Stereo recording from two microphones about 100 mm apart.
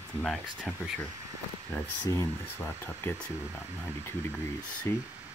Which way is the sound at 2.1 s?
25° left (ahead or behind).